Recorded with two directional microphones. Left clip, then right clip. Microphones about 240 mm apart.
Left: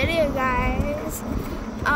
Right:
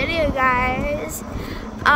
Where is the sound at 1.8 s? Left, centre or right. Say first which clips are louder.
Right 7 dB; centre.